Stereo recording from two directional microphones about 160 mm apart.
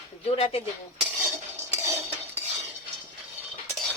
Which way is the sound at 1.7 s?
15° right (ahead or behind).